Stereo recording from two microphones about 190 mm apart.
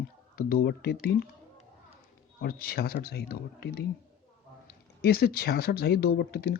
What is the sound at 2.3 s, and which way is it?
Speech, 55° left (ahead or behind).